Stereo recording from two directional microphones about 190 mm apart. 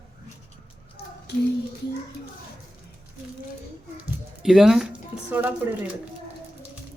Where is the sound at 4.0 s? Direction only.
Centre (ahead or behind).